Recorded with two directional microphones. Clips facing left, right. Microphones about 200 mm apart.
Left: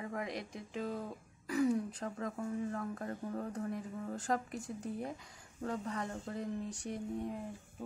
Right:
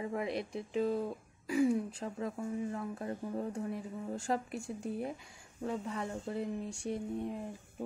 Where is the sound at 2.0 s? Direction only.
15° right (ahead or behind).